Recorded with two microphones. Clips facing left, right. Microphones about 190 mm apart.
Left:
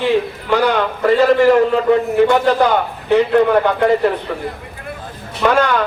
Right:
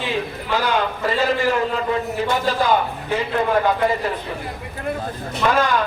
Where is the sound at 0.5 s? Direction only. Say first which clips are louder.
Left 6 dB; 60° left (ahead or behind).